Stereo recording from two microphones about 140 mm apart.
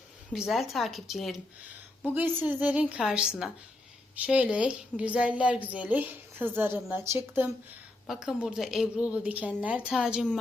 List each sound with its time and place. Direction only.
0.3 s a woman's voice: centre (ahead or behind)
2.1 s a woman's voice: 15° right (ahead or behind)
8.0 s a woman's voice: centre (ahead or behind)